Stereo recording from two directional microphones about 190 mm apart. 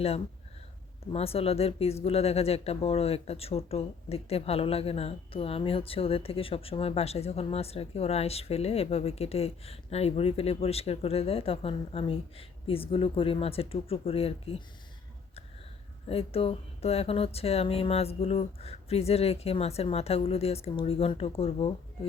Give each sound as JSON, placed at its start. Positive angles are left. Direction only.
{"t": 1.1, "sound": "speech", "side_deg": 30}
{"t": 16.0, "sound": "speech", "side_deg": 30}